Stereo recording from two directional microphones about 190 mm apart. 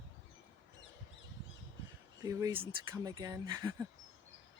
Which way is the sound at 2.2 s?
20° right (ahead or behind).